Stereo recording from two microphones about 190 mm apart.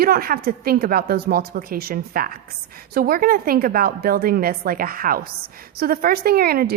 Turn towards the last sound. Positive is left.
turn(degrees=-55)  # may be behind; listen again after turning